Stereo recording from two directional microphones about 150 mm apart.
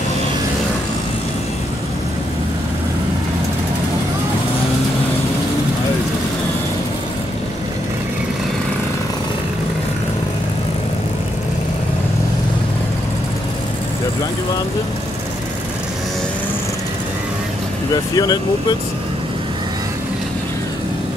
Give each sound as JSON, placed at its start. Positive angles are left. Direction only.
{"t": 18.1, "sound": "speech", "side_deg": 25}